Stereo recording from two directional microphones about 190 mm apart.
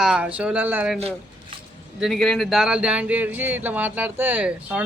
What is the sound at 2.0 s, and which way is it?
Speech, centre (ahead or behind).